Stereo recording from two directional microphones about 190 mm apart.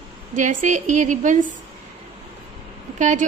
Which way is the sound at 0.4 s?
40° right (ahead or behind).